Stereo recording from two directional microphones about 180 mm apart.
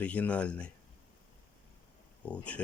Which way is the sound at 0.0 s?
10° left (ahead or behind).